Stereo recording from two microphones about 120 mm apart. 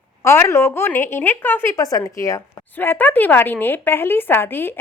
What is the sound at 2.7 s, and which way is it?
A woman's voice, 15° left (ahead or behind).